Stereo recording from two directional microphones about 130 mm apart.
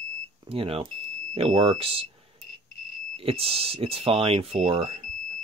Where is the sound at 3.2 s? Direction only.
45° right (ahead or behind).